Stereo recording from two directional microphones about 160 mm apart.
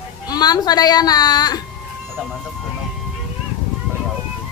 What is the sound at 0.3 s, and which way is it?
A woman's voice, 25° left (ahead or behind).